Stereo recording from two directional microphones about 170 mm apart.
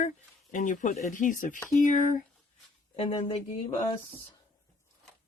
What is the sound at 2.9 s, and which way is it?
Speech, 35° left (ahead or behind).